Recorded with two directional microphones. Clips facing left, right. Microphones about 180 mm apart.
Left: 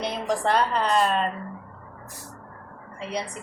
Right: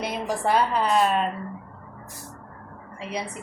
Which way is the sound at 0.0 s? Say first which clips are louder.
Left 1 dB; 5° right (ahead or behind).